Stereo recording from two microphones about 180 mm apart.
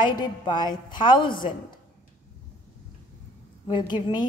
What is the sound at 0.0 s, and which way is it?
A woman's voice, 25° left (ahead or behind).